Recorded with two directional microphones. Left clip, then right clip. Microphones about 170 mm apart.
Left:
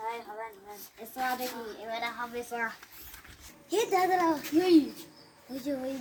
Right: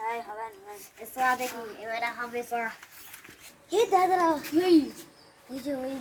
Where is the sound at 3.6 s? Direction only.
10° left (ahead or behind).